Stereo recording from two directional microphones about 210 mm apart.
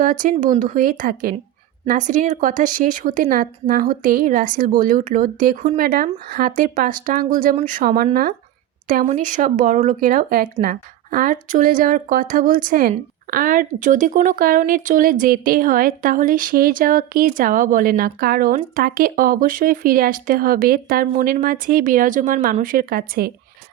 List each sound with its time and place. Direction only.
0.0 s speech: 40° right (ahead or behind)